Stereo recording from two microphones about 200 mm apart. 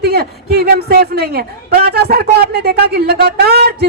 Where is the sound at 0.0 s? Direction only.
50° right (ahead or behind).